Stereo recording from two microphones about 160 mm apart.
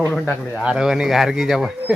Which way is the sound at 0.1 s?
10° left (ahead or behind).